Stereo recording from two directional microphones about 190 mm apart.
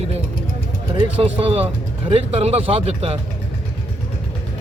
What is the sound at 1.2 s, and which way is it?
Speech, 30° right (ahead or behind).